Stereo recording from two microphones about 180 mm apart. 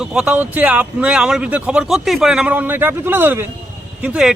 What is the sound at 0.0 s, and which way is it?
A man's voice, 5° right (ahead or behind).